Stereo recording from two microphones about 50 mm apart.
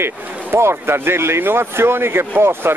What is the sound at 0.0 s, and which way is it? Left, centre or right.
Speech, right.